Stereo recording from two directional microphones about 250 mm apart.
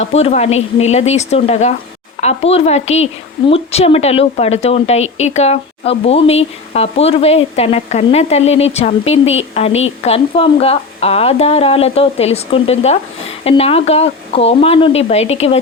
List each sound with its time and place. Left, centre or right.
0.0 s a woman's voice: left